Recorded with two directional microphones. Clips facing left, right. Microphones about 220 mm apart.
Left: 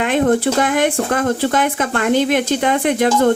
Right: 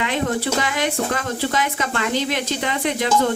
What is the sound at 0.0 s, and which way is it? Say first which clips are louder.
Speech: left 7 dB; 50° left (ahead or behind).